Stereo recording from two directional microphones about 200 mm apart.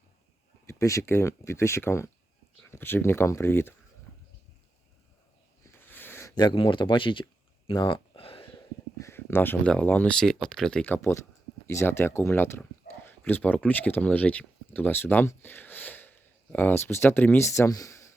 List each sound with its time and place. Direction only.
0.7 s speech: 15° left (ahead or behind)
5.6 s a sound: 10° left (ahead or behind); by 8.4 s 25° left (ahead or behind)
8.5 s speech: 15° left (ahead or behind)